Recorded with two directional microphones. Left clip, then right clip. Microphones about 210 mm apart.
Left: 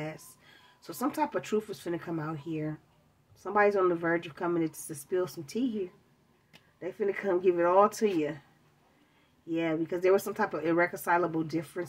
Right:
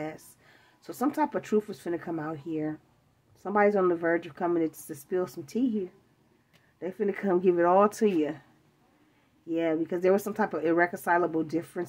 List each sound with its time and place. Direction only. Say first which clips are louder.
0.8 s speech: right 3 dB; 45° right (ahead or behind)
6.8 s speech: right 1 dB; 45° right (ahead or behind)
9.5 s speech: right 3 dB; 50° right (ahead or behind)